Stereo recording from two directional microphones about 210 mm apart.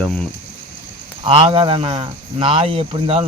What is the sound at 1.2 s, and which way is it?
Speech, 25° right (ahead or behind).